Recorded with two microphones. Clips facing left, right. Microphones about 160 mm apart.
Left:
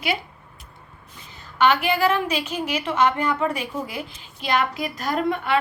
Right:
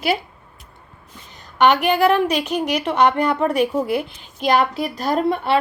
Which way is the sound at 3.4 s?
60° right (ahead or behind).